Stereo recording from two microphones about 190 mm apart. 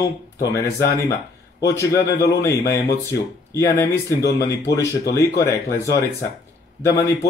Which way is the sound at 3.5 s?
15° left (ahead or behind).